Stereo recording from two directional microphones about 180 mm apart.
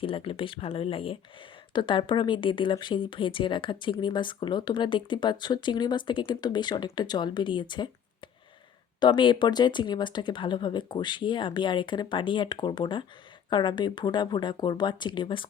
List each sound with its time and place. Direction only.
0.0 s speech: 30° left (ahead or behind)
9.0 s speech: 25° left (ahead or behind)